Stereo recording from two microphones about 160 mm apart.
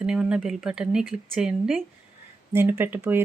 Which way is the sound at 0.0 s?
5° right (ahead or behind).